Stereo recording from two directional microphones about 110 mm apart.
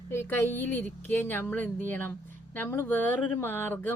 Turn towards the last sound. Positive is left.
turn(degrees=20)  # may be behind; listen again after turning